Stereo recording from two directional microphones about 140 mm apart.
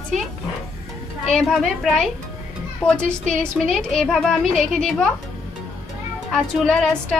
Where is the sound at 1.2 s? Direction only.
Centre (ahead or behind).